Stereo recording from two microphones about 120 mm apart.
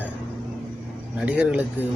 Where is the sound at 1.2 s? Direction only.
10° right (ahead or behind).